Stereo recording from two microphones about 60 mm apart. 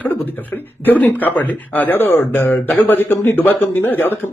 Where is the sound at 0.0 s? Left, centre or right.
Left.